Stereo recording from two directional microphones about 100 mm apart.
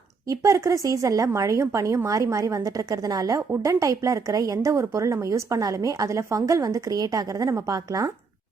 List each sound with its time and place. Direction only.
0.3 s a woman's voice: 30° right (ahead or behind)